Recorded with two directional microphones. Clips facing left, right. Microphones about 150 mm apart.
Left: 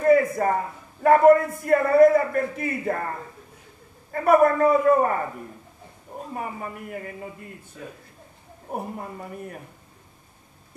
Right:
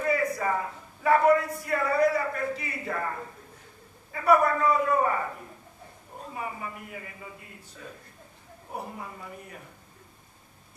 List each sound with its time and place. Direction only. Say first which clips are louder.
0.0 s a sound: left 8 dB; 50° left (ahead or behind)
1.0 s a man's voice: left 6 dB; 50° left (ahead or behind)
4.1 s a man's voice: left 5 dB; 50° left (ahead or behind)
6.3 s a man's voice: left 3 dB; 45° left (ahead or behind)
8.7 s a man's voice: left 6 dB; 50° left (ahead or behind)